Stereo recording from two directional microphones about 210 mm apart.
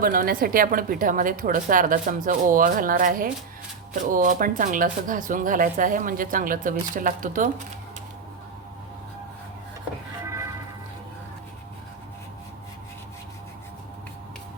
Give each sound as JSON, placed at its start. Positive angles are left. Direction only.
{"t": 0.0, "sound": "speech", "side_deg": -45}
{"t": 10.2, "sound": "music", "side_deg": -15}